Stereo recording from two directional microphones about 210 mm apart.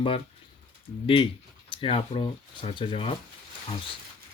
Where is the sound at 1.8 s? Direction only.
25° left (ahead or behind).